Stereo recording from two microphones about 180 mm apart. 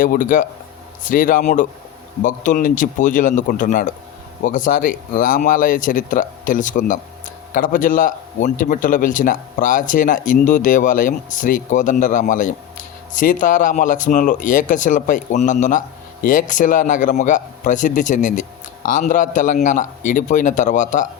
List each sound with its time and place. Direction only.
0.0 s a man's voice: 50° left (ahead or behind)